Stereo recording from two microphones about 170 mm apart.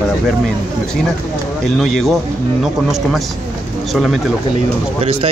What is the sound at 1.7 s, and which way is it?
Speech, centre (ahead or behind).